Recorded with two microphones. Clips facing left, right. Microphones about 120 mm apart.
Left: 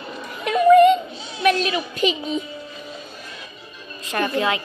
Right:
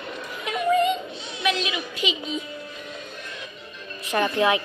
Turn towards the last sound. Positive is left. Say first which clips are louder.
# right 1 dB
turn(degrees=-15)  # may be behind; listen again after turning